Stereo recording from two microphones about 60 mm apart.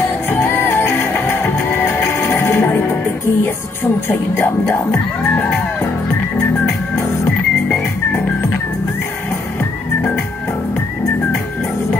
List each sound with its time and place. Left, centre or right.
0.0 s music: left
4.1 s speech: left
7.2 s music: left